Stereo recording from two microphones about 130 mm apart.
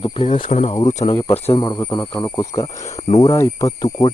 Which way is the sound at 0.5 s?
60° left (ahead or behind).